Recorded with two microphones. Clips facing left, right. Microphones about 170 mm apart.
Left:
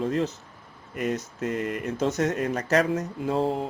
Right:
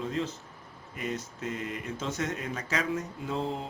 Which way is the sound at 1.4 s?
65° left (ahead or behind).